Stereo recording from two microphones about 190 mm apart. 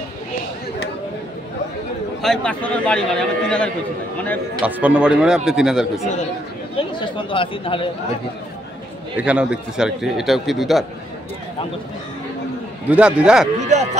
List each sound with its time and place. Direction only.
2.2 s a man's voice: 5° left (ahead or behind)
4.6 s a man's voice: 10° right (ahead or behind)
6.8 s speech: 25° left (ahead or behind)
9.1 s a man's voice: 5° right (ahead or behind)
12.9 s a man's voice: 5° right (ahead or behind)
13.6 s speech: 35° right (ahead or behind)